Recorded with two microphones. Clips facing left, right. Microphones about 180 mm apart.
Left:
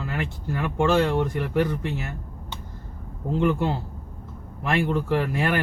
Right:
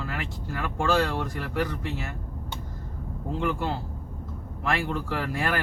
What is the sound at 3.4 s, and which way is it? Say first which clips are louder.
Speech: left 6 dB; 25° left (ahead or behind).